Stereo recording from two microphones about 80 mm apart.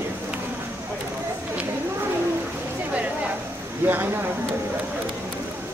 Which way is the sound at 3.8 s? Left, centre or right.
Right.